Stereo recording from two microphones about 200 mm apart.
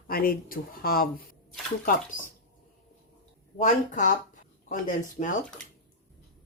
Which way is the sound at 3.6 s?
40° left (ahead or behind).